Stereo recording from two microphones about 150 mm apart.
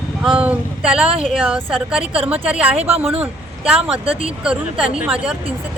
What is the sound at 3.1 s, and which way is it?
Speech, 40° right (ahead or behind).